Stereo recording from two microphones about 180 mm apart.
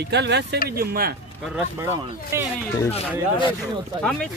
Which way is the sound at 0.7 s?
55° right (ahead or behind).